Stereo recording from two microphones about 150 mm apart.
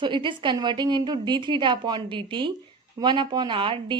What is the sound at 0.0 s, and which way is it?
A woman's voice, 30° right (ahead or behind).